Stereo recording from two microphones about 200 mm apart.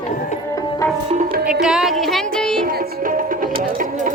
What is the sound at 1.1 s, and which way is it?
Music, 45° right (ahead or behind).